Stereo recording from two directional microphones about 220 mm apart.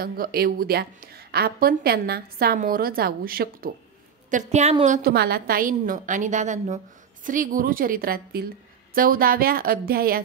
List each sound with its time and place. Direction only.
0.0 s a woman's voice: 45° right (ahead or behind)